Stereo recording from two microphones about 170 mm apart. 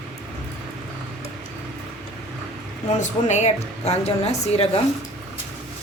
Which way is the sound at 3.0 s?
45° left (ahead or behind).